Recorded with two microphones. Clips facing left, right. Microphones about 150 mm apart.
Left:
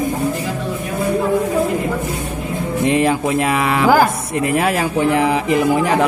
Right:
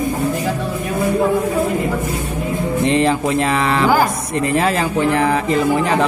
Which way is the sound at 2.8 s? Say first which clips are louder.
Left 1 dB; 5° left (ahead or behind).